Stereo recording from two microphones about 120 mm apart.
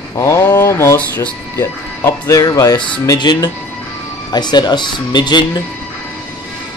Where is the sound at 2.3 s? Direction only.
30° left (ahead or behind).